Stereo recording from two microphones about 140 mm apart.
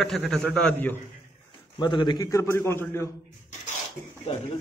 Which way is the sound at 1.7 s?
35° left (ahead or behind).